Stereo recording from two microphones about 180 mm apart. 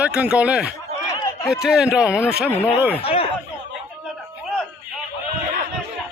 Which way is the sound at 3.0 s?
35° left (ahead or behind).